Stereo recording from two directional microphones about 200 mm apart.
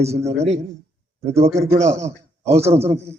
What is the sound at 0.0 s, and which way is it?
Speech, 30° right (ahead or behind).